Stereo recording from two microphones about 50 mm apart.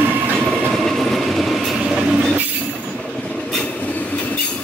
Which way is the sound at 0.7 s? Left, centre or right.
Centre.